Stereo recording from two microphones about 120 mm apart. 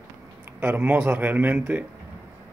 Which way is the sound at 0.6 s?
15° right (ahead or behind).